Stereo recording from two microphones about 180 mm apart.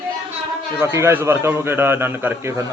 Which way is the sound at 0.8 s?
15° right (ahead or behind).